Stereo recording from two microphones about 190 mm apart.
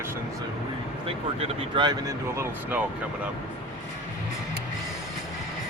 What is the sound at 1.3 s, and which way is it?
Speech, 30° right (ahead or behind).